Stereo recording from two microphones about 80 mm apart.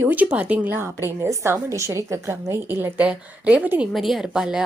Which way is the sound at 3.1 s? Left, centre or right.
Centre.